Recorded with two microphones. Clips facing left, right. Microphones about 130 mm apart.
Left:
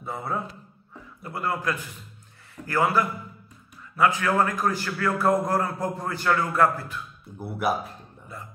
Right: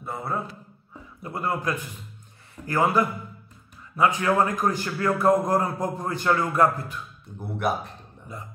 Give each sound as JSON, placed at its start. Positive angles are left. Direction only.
{"t": 0.0, "sound": "a man's voice", "side_deg": 0}
{"t": 1.2, "sound": "a man's voice", "side_deg": -20}
{"t": 7.3, "sound": "a man's voice", "side_deg": 5}